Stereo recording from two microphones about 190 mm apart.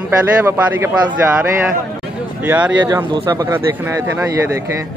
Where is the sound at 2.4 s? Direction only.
10° right (ahead or behind).